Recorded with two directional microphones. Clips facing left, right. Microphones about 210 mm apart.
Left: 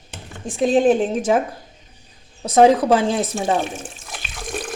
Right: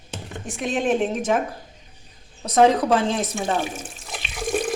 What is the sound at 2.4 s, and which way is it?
Speech, 30° left (ahead or behind).